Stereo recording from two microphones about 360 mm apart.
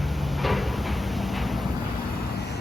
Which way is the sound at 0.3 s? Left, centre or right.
Centre.